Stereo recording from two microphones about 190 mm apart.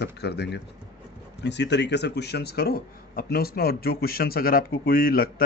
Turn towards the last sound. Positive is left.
turn(degrees=50)  # may be behind; listen again after turning